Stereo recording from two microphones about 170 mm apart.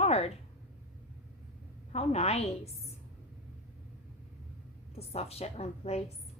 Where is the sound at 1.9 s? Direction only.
40° left (ahead or behind).